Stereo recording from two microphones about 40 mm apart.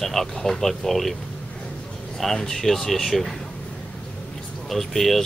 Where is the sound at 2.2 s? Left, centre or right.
Centre.